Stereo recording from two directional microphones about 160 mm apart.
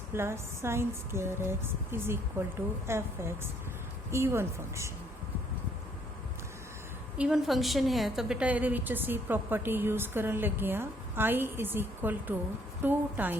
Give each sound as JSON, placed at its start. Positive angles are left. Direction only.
{"t": 0.1, "sound": "a woman's voice", "side_deg": -15}
{"t": 7.2, "sound": "a woman's voice", "side_deg": -5}